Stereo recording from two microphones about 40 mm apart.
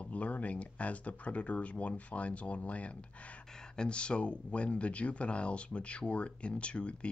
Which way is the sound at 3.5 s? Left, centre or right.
Left.